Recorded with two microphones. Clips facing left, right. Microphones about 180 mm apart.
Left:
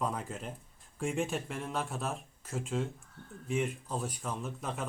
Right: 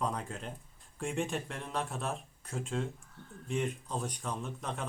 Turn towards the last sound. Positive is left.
turn(degrees=5)  # may be behind; listen again after turning